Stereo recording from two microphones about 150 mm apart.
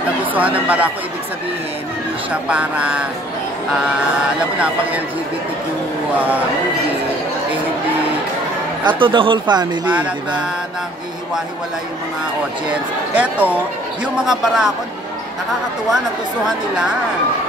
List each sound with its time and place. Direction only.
0.2 s speech: 10° right (ahead or behind)
2.4 s speech: 10° right (ahead or behind)
4.4 s speech: 10° right (ahead or behind)
8.8 s speech: 35° right (ahead or behind)
13.1 s a man's voice: 10° right (ahead or behind)
16.4 s a man's voice: 5° right (ahead or behind)